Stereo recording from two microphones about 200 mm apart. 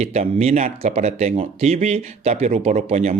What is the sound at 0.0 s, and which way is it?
Speech, 35° right (ahead or behind).